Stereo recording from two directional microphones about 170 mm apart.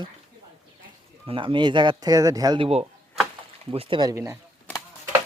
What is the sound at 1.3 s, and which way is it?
Speech, 30° right (ahead or behind).